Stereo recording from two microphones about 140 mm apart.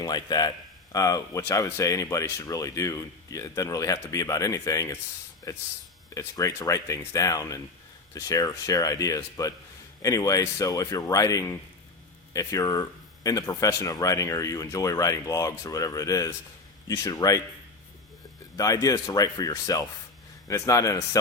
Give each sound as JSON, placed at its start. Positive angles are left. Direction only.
{"t": 0.0, "sound": "speech", "side_deg": 30}
{"t": 18.5, "sound": "speech", "side_deg": 25}